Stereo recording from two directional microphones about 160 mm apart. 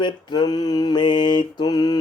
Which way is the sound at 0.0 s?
25° left (ahead or behind).